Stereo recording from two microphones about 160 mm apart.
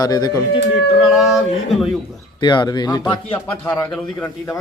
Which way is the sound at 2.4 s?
30° left (ahead or behind).